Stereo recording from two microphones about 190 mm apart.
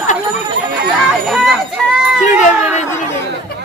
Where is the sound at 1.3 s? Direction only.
Centre (ahead or behind).